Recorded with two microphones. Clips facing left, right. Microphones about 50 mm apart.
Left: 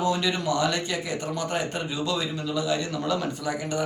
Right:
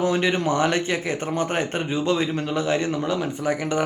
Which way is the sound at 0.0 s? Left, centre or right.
Right.